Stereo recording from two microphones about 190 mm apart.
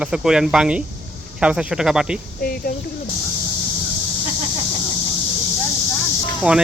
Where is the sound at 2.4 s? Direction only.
50° left (ahead or behind).